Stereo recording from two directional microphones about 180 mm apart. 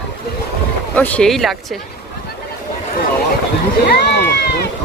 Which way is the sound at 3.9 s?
65° left (ahead or behind).